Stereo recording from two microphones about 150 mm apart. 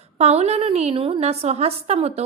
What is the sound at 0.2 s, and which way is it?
A woman's voice, 45° right (ahead or behind).